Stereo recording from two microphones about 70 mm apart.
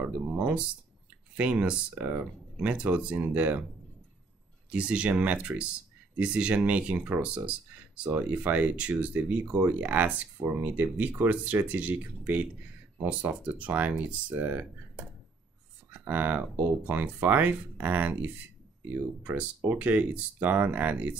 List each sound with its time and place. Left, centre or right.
0.0 s speech: centre
4.6 s speech: centre
15.9 s speech: right